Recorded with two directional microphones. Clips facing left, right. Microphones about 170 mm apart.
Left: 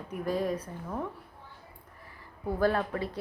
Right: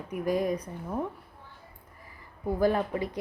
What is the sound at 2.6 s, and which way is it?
Speech, 15° right (ahead or behind).